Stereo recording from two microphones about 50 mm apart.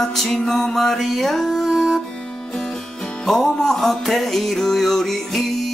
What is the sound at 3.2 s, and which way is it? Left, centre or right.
Music, centre.